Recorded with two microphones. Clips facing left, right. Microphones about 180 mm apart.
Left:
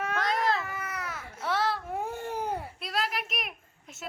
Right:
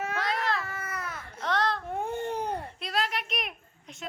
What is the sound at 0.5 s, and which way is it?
Baby cry, 20° left (ahead or behind).